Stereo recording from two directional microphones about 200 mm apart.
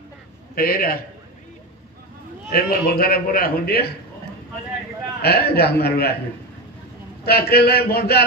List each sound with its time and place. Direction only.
0.6 s a man's voice: 45° left (ahead or behind)
2.5 s a man's voice: 50° left (ahead or behind)
5.2 s a man's voice: 50° left (ahead or behind)
7.2 s a man's voice: 50° left (ahead or behind)